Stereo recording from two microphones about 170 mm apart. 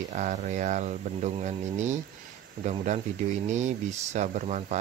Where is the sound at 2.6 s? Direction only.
45° right (ahead or behind).